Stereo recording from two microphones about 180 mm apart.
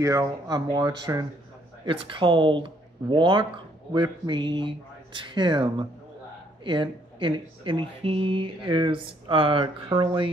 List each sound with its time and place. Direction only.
0.0 s speech: 20° right (ahead or behind)